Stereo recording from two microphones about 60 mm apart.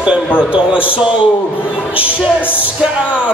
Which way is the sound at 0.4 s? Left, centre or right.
Centre.